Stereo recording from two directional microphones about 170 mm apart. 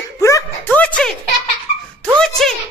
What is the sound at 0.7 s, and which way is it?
Music, 5° left (ahead or behind).